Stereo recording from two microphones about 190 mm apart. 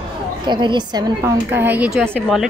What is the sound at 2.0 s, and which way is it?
Speech, centre (ahead or behind).